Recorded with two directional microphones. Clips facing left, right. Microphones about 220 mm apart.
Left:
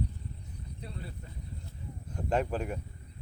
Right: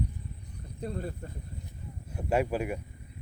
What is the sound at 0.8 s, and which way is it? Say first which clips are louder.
Speech: right 10 dB; 45° right (ahead or behind).